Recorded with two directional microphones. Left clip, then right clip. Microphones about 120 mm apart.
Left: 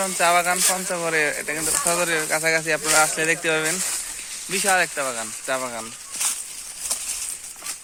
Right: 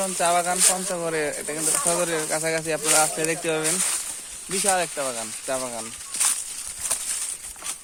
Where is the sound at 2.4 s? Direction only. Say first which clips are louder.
Left 4 dB; 5° right (ahead or behind).